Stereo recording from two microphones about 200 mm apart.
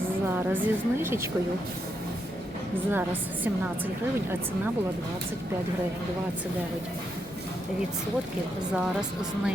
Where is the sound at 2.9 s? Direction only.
10° right (ahead or behind).